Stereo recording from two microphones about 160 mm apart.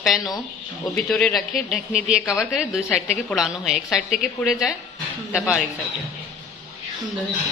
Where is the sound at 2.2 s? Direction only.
20° left (ahead or behind).